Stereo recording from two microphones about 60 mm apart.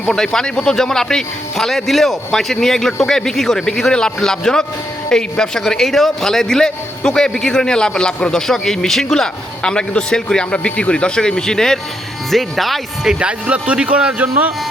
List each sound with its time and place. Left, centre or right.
0.1 s a man's voice: centre
13.1 s speech: centre